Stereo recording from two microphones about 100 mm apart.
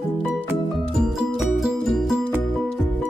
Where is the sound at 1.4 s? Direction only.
5° right (ahead or behind).